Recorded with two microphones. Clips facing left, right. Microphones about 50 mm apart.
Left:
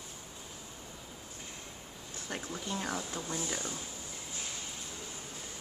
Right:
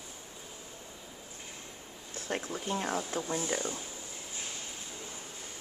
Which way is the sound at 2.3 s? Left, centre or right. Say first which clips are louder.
Right 4 dB; right.